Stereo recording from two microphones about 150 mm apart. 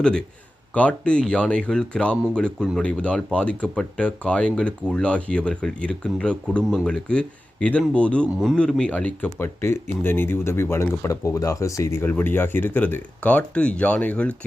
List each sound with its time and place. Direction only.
0.0 s a man's voice: 5° left (ahead or behind)